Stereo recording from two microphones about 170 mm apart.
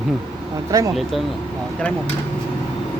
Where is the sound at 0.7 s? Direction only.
20° right (ahead or behind).